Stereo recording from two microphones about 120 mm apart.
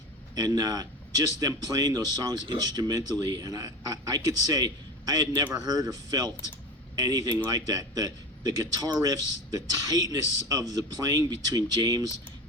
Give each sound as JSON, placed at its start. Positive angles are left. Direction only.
{"t": 0.3, "sound": "a man's voice", "side_deg": -30}